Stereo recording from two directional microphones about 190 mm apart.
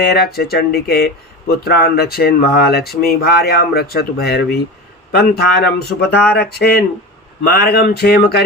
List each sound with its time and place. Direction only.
0.0 s speech: 55° left (ahead or behind)